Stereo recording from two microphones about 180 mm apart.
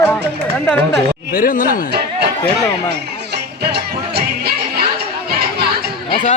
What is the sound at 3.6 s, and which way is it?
Music, 60° right (ahead or behind).